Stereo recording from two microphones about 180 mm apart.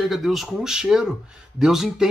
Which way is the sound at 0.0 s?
Centre (ahead or behind).